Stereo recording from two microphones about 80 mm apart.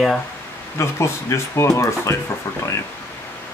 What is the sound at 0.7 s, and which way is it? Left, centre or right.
Speech, left.